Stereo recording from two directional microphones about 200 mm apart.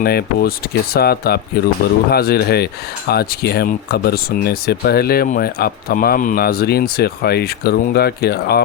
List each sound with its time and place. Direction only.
0.0 s speech: 50° left (ahead or behind)